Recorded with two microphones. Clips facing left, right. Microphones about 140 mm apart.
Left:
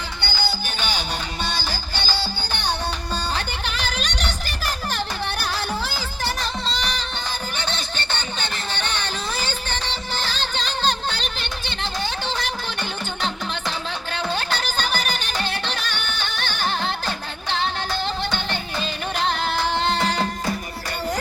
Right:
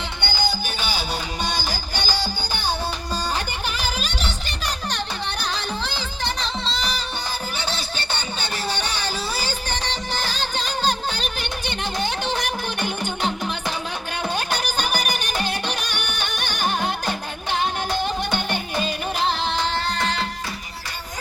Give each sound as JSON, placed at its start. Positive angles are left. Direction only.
{"t": 0.2, "sound": "music", "side_deg": -15}
{"t": 3.3, "sound": "music", "side_deg": -10}
{"t": 7.7, "sound": "a sound", "side_deg": -10}
{"t": 14.3, "sound": "music", "side_deg": -10}
{"t": 19.2, "sound": "music", "side_deg": 0}
{"t": 19.8, "sound": "music", "side_deg": 30}